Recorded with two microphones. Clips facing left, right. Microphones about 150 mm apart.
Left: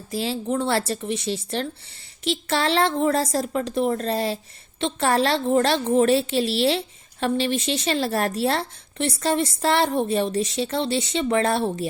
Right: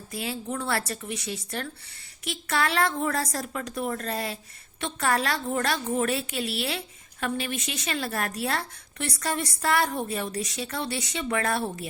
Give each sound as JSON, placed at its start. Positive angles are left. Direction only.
{"t": 0.1, "sound": "a woman's voice", "side_deg": 30}